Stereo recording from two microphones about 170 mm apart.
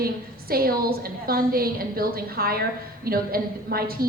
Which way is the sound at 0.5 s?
60° right (ahead or behind).